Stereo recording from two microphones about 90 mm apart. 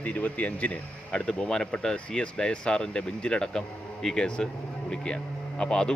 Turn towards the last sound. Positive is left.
turn(degrees=10)  # may be behind; listen again after turning